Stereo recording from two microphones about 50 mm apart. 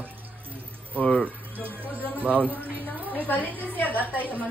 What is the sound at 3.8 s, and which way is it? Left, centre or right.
Speech, left.